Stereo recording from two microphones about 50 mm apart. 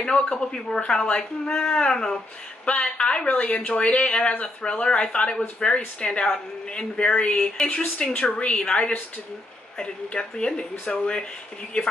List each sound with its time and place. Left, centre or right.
0.0 s speech: centre
2.6 s speech: left